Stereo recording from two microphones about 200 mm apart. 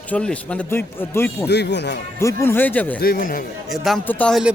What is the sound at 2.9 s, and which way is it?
Speech, 45° left (ahead or behind).